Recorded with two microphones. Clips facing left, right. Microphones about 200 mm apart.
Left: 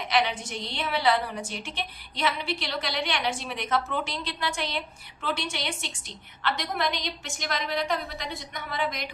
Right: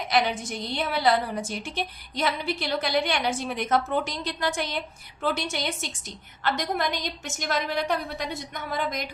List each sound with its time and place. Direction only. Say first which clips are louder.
0.1 s a woman's voice: right 2 dB; 40° right (ahead or behind)
8.7 s a woman's voice: right 1 dB; 45° right (ahead or behind)